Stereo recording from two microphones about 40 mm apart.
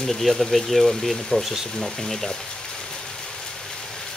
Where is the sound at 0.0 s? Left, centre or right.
Centre.